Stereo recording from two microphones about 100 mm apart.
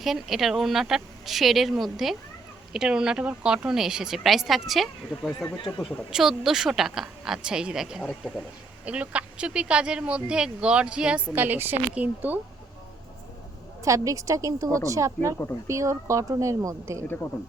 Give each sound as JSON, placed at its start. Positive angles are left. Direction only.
{"t": 0.0, "sound": "a woman's voice", "side_deg": 0}
{"t": 13.8, "sound": "a woman's voice", "side_deg": -30}